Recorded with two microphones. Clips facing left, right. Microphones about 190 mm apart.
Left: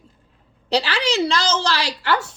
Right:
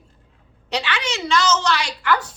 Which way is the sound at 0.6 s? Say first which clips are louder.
Left 5 dB; 35° left (ahead or behind).